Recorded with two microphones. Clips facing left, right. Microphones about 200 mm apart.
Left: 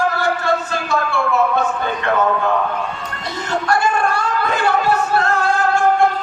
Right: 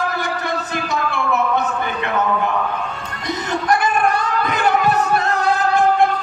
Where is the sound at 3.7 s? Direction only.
20° right (ahead or behind).